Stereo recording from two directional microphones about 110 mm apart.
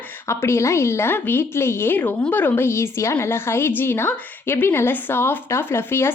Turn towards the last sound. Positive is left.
turn(degrees=20)  # may be behind; listen again after turning